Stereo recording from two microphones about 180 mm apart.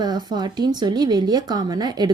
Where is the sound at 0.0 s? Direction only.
20° right (ahead or behind).